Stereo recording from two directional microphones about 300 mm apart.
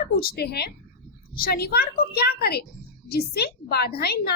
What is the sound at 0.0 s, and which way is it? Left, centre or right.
A woman's voice, left.